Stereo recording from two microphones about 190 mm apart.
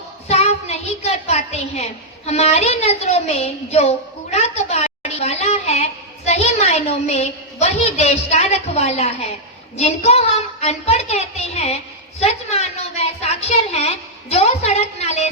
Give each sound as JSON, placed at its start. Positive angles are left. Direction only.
{"t": 0.3, "sound": "a woman's voice", "side_deg": 35}